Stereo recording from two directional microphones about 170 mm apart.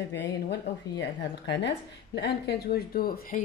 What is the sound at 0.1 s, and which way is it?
Speech, 90° left.